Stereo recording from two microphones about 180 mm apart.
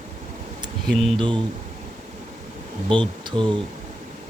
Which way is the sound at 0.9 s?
Centre (ahead or behind).